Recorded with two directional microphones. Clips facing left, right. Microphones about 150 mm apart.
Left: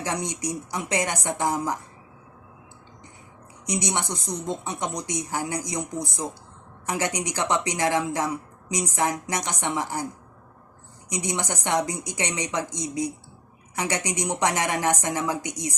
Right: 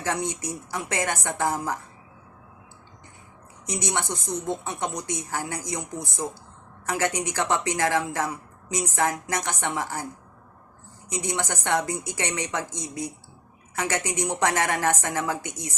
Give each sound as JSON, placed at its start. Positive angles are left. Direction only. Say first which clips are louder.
{"t": 0.0, "sound": "speech", "louder": "even", "side_deg": 15}
{"t": 3.7, "sound": "speech", "louder": "left 1 dB", "side_deg": 15}
{"t": 11.1, "sound": "speech", "louder": "even", "side_deg": 15}